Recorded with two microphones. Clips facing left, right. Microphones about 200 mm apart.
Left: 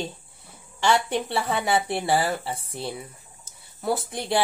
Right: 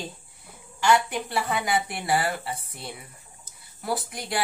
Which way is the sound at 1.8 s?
30° left (ahead or behind).